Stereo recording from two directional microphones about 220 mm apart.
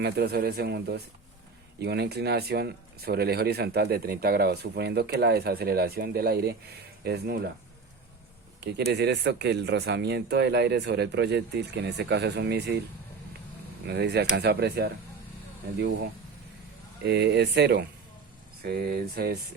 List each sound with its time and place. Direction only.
0.0 s speech: 50° right (ahead or behind)
8.6 s speech: 50° right (ahead or behind)
13.8 s speech: 50° right (ahead or behind)
17.0 s speech: 50° right (ahead or behind)